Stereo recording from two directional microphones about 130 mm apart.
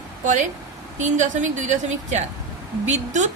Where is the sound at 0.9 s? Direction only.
65° right (ahead or behind).